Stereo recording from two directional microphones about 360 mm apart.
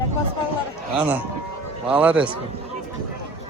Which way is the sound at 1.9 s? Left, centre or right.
Centre.